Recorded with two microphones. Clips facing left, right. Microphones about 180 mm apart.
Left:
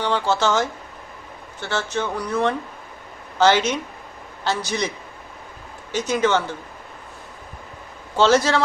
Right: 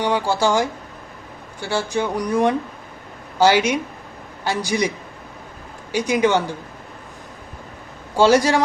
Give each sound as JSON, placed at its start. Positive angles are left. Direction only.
{"t": 0.0, "sound": "speech", "side_deg": -10}
{"t": 5.9, "sound": "speech", "side_deg": -10}
{"t": 8.1, "sound": "speech", "side_deg": -10}